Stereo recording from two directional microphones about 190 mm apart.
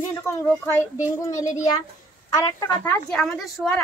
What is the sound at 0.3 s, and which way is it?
Speech, 10° left (ahead or behind).